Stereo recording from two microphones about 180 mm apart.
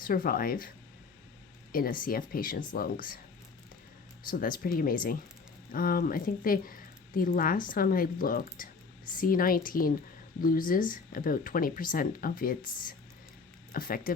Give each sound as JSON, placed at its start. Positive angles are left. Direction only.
{"t": 0.0, "sound": "speech", "side_deg": 55}
{"t": 1.7, "sound": "speech", "side_deg": 50}
{"t": 4.3, "sound": "speech", "side_deg": 50}